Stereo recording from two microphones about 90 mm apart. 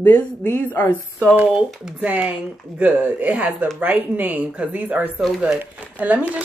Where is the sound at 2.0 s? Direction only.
20° right (ahead or behind).